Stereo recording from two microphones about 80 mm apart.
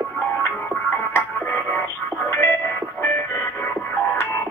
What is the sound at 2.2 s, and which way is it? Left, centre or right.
Music, left.